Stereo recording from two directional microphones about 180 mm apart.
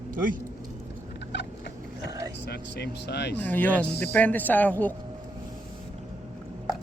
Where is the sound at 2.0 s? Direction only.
20° right (ahead or behind).